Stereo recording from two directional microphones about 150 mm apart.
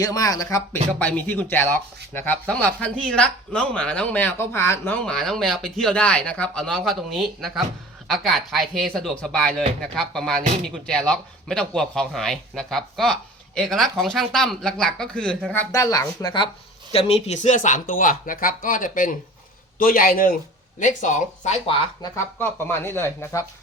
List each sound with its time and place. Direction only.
0.0 s speech: 25° left (ahead or behind)
0.9 s speech: 10° left (ahead or behind)
5.0 s speech: centre (ahead or behind)
15.7 s speech: 20° left (ahead or behind)
16.9 s speech: 40° left (ahead or behind)
17.2 s a man's voice: 50° left (ahead or behind); by 20.3 s 70° left (ahead or behind)
20.7 s speech: 55° left (ahead or behind)
21.7 s speech: 35° left (ahead or behind)
22.1 s speech: 15° left (ahead or behind)